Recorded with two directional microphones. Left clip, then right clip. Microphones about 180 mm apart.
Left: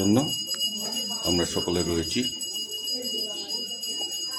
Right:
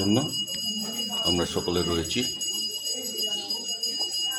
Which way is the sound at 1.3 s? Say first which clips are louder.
Left 4 dB; 20° left (ahead or behind).